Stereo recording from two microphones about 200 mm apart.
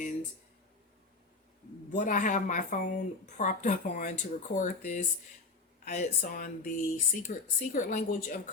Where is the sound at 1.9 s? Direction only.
40° left (ahead or behind).